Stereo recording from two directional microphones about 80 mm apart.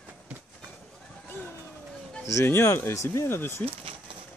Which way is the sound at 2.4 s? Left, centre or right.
Left.